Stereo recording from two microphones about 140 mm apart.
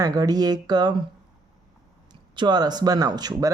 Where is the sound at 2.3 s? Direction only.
30° right (ahead or behind).